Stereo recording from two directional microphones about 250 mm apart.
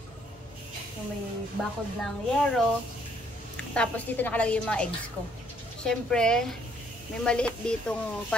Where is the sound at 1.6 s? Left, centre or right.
Centre.